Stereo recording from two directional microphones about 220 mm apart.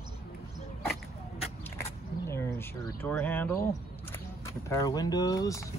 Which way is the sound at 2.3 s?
10° left (ahead or behind).